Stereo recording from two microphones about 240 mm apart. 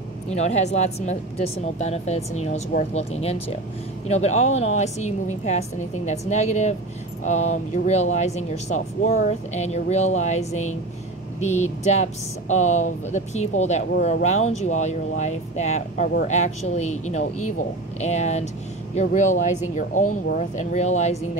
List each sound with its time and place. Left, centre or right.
0.3 s speech: left